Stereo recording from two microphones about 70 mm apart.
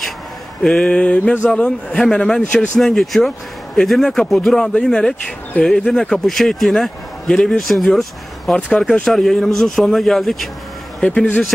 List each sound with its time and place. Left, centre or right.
0.6 s a man's voice: centre
11.0 s speech: centre